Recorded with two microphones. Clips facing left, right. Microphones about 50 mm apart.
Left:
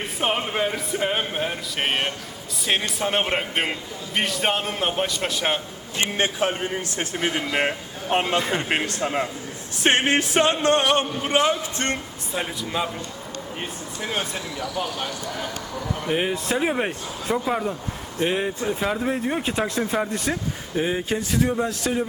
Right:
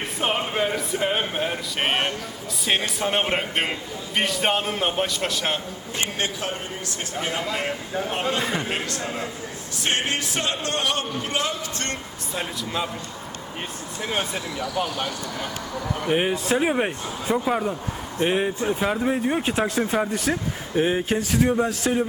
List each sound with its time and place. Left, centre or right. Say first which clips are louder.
0.2 s a man's voice: even; centre
6.0 s a man's voice: left 5 dB; left
7.0 s music: left 1 dB; left
10.9 s a man's voice: left 5 dB; left
12.3 s speech: left 1 dB; centre
14.0 s a man's voice: right 1 dB; centre
20.7 s speech: right 2 dB; centre